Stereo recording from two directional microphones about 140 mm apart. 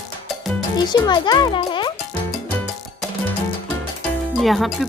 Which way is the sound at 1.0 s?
30° left (ahead or behind).